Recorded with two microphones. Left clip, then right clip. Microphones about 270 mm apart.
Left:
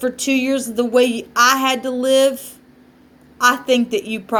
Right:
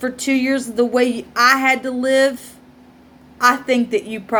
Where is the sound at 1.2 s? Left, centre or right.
Centre.